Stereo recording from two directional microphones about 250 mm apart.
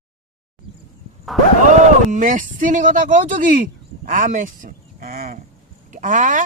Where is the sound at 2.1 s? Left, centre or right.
Right.